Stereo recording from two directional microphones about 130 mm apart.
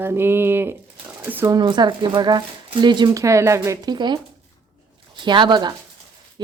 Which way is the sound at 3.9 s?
35° right (ahead or behind).